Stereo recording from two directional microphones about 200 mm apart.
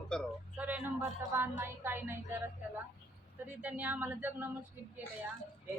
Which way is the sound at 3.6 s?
5° right (ahead or behind).